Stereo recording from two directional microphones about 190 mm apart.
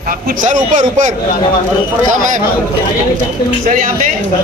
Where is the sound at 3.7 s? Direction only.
45° right (ahead or behind).